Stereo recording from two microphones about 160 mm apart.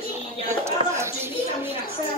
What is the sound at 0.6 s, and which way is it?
Speech, 15° right (ahead or behind).